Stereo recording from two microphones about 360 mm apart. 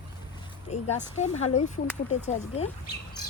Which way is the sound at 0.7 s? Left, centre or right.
Centre.